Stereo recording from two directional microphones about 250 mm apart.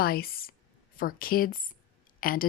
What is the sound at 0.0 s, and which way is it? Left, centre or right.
A woman's voice, left.